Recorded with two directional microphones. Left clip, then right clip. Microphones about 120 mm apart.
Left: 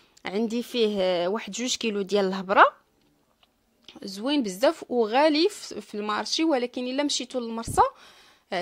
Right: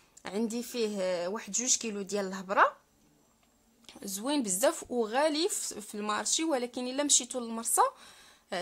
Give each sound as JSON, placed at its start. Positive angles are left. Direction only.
{"t": 0.2, "sound": "a sound", "side_deg": 50}
{"t": 0.5, "sound": "speech", "side_deg": 50}
{"t": 3.8, "sound": "speech", "side_deg": 30}
{"t": 5.0, "sound": "speech", "side_deg": 45}